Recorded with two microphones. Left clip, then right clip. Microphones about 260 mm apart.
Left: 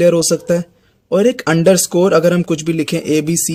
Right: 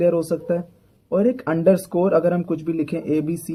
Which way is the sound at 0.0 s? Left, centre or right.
Left.